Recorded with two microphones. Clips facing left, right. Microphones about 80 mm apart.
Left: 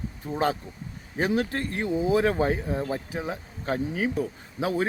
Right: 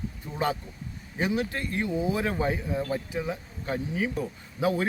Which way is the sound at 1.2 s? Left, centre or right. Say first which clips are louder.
Left 3 dB; left.